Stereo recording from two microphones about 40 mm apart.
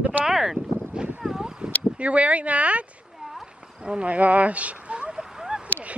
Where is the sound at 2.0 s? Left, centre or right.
Right.